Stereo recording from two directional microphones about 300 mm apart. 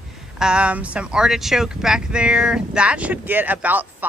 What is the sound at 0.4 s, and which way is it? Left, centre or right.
Speech, centre.